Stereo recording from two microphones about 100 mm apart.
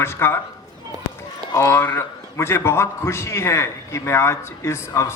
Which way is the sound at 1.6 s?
25° left (ahead or behind).